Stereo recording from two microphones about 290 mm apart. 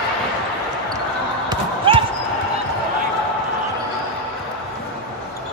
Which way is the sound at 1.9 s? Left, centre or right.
Centre.